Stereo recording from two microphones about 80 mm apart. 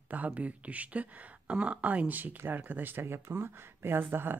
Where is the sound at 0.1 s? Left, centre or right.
Centre.